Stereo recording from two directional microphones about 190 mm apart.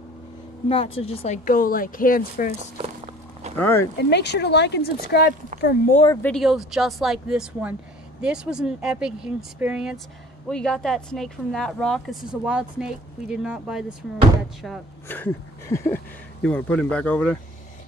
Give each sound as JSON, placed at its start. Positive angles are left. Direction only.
{"t": 0.7, "sound": "speech", "side_deg": 30}
{"t": 3.5, "sound": "speech", "side_deg": 10}
{"t": 4.0, "sound": "speech", "side_deg": 60}
{"t": 6.2, "sound": "speech", "side_deg": 0}
{"t": 15.0, "sound": "speech", "side_deg": 10}